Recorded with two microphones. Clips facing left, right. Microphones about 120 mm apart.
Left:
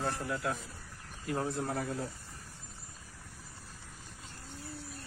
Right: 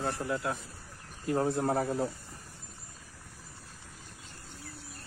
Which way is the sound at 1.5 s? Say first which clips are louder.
Right 6 dB; 45° right (ahead or behind).